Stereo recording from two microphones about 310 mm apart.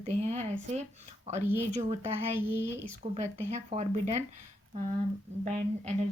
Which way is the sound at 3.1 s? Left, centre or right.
Right.